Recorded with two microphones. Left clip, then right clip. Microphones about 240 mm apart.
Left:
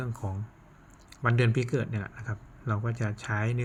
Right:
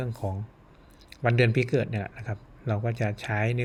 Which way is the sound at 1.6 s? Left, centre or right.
Centre.